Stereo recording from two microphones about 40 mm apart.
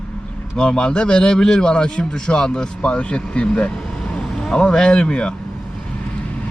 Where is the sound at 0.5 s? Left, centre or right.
Centre.